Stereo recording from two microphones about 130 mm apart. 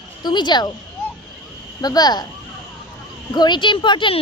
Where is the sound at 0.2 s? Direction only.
35° left (ahead or behind).